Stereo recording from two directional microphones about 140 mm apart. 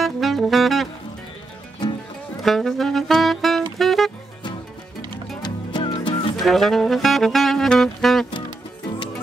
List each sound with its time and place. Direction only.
0.0 s saxophone: centre (ahead or behind)
2.4 s saxophone: centre (ahead or behind)
3.7 s music: centre (ahead or behind)
5.4 s music: 30° left (ahead or behind)
6.4 s saxophone: centre (ahead or behind)